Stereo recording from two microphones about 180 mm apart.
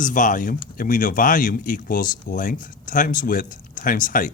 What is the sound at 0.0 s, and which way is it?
Speech, 45° left (ahead or behind).